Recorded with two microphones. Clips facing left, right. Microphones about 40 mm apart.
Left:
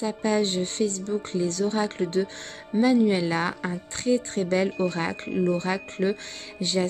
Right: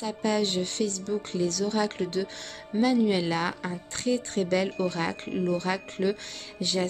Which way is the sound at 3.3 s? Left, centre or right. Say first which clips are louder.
Left 2 dB; left.